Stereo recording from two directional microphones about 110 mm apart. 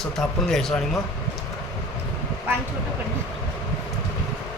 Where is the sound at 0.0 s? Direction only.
5° left (ahead or behind).